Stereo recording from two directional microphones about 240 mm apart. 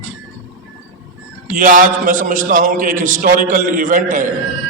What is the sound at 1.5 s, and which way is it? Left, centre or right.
A man's voice, right.